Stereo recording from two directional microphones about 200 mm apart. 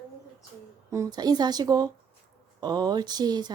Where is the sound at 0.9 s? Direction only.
15° right (ahead or behind).